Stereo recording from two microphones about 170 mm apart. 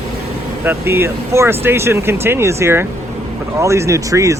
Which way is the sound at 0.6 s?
15° right (ahead or behind).